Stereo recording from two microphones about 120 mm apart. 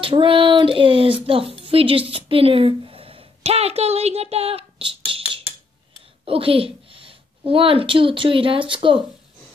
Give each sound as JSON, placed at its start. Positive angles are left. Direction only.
{"t": 0.0, "sound": "a sound", "side_deg": -45}
{"t": 1.2, "sound": "speech", "side_deg": -50}
{"t": 6.2, "sound": "a woman's voice", "side_deg": -50}